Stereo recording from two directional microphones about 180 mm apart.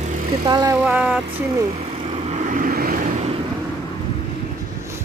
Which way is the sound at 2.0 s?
35° right (ahead or behind).